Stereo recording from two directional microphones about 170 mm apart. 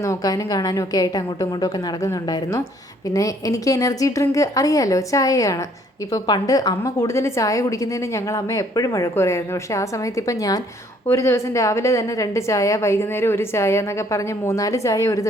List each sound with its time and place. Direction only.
0.0 s a woman's voice: 20° left (ahead or behind)